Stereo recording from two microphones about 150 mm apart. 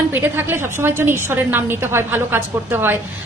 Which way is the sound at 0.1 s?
15° right (ahead or behind).